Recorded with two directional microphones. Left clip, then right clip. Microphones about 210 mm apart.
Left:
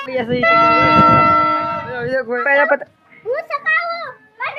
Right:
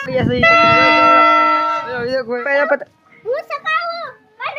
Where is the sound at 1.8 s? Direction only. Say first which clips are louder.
Even; 20° right (ahead or behind).